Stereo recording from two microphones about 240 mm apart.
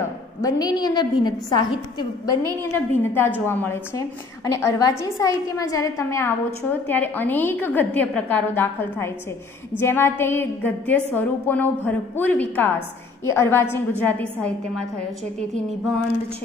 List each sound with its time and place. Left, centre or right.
0.4 s a woman's voice: centre